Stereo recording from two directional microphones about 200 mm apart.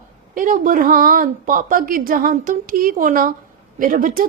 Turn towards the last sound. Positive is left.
turn(degrees=-45)  # may be behind; listen again after turning